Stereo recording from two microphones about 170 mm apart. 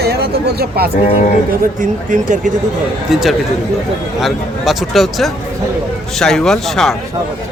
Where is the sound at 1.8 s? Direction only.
50° right (ahead or behind).